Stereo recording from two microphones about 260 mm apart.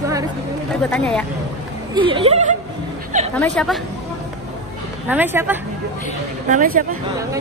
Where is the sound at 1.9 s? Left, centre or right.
Centre.